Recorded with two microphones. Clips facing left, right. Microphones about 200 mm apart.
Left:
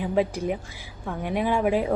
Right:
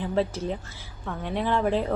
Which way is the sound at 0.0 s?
10° left (ahead or behind).